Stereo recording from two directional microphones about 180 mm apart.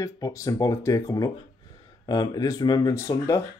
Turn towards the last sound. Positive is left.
turn(degrees=15)  # may be behind; listen again after turning